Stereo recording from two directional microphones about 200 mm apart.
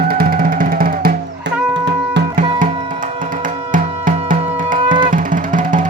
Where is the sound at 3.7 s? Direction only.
40° right (ahead or behind).